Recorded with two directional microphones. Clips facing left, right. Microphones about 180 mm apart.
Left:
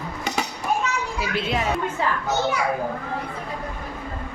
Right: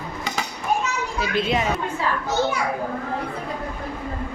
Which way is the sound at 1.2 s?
5° left (ahead or behind).